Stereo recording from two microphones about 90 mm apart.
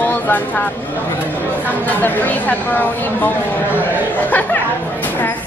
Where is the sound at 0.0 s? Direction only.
20° left (ahead or behind).